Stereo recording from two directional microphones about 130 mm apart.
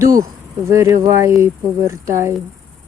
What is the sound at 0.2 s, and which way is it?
Speech, 20° right (ahead or behind).